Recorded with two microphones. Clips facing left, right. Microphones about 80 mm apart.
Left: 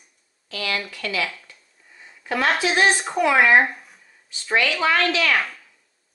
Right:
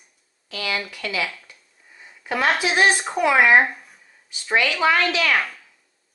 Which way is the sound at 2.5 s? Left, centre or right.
Centre.